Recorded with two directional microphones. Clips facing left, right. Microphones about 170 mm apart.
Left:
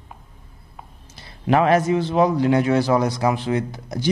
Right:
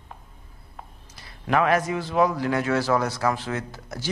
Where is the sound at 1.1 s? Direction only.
25° left (ahead or behind).